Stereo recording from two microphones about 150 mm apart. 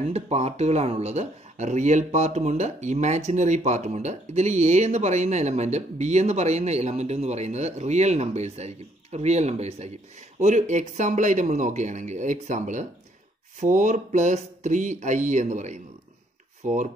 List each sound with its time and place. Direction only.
0.1 s speech: 45° right (ahead or behind)